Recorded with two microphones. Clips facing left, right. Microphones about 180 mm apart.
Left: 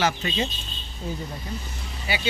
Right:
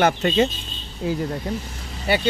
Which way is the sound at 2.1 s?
60° right (ahead or behind).